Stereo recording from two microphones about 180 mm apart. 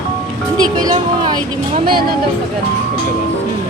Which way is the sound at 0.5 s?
20° right (ahead or behind).